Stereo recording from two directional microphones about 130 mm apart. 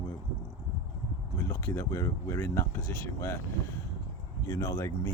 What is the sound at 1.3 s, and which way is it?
Speech, 20° left (ahead or behind).